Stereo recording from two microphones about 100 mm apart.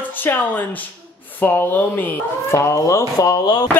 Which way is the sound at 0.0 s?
20° left (ahead or behind).